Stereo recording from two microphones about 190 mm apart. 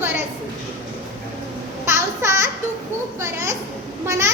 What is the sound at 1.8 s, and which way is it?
Babbling, 15° right (ahead or behind).